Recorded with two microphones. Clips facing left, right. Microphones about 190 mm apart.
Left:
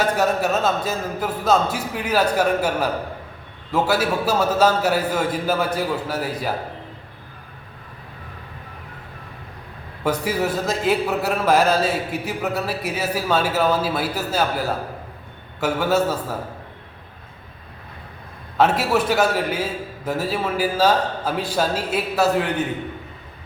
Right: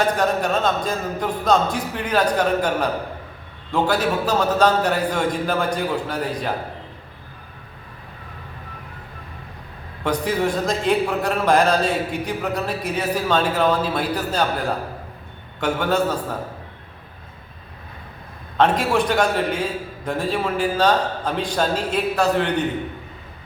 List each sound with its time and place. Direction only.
0.0 s speech: 5° left (ahead or behind)
10.0 s a man's voice: 5° left (ahead or behind)
18.5 s a man's voice: 5° left (ahead or behind)